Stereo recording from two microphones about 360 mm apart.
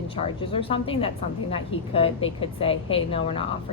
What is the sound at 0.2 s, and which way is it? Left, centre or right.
A woman's voice, centre.